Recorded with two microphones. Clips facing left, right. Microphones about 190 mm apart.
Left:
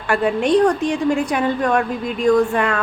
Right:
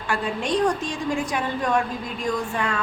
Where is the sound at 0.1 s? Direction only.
60° left (ahead or behind).